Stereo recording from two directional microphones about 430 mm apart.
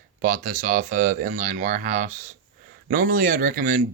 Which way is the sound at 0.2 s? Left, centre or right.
Centre.